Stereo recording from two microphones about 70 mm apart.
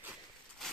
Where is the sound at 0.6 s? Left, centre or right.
Centre.